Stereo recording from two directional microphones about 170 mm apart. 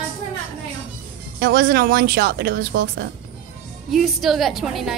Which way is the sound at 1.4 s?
65° right (ahead or behind).